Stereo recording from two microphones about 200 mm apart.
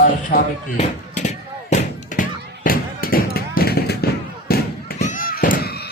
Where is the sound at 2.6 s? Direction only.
45° left (ahead or behind).